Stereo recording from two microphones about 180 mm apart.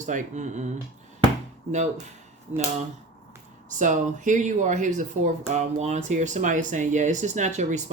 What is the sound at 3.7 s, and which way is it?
Speech, 45° right (ahead or behind).